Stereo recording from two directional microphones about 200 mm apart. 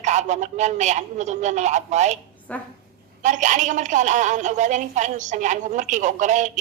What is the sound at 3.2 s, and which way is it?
A woman's voice, 40° right (ahead or behind).